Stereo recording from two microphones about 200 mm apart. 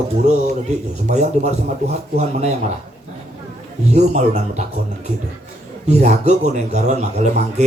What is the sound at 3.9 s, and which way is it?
Speech, 35° right (ahead or behind).